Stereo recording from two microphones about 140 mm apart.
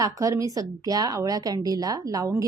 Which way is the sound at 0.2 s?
25° right (ahead or behind).